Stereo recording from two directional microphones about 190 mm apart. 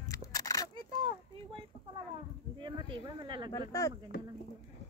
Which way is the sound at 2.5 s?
25° right (ahead or behind).